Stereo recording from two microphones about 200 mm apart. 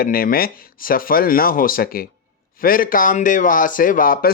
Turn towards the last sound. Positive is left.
turn(degrees=45)  # may be behind; listen again after turning